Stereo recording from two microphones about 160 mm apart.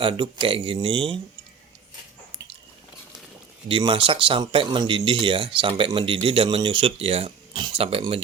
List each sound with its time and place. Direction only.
0.0 s speech: 35° right (ahead or behind)
3.7 s speech: 30° right (ahead or behind)